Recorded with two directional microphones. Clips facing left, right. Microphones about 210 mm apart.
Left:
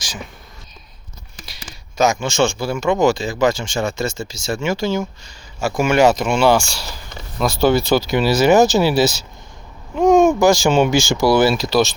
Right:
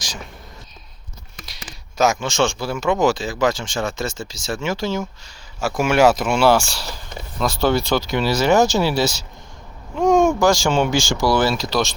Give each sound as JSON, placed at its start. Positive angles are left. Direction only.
{"t": 2.1, "sound": "speech", "side_deg": 0}
{"t": 10.7, "sound": "speech", "side_deg": 20}
{"t": 10.9, "sound": "speech", "side_deg": 10}